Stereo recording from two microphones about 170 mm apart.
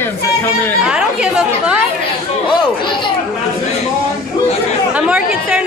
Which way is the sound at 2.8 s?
30° left (ahead or behind).